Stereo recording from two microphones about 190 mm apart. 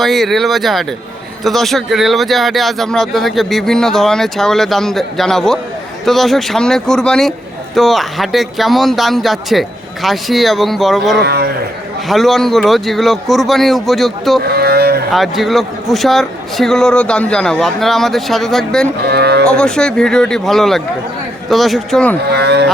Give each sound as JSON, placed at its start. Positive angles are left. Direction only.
{"t": 0.0, "sound": "speech", "side_deg": 0}
{"t": 11.2, "sound": "speech", "side_deg": -60}
{"t": 12.0, "sound": "speech", "side_deg": 0}
{"t": 14.4, "sound": "a sound", "side_deg": -55}
{"t": 15.1, "sound": "speech", "side_deg": 0}
{"t": 19.0, "sound": "speech", "side_deg": -55}
{"t": 19.5, "sound": "speech", "side_deg": 5}
{"t": 22.2, "sound": "speech", "side_deg": -60}